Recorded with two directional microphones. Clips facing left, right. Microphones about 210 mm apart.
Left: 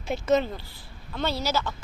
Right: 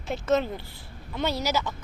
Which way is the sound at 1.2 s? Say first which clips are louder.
Even; 15° right (ahead or behind).